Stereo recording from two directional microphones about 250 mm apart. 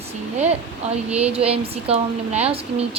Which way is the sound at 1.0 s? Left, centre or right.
Centre.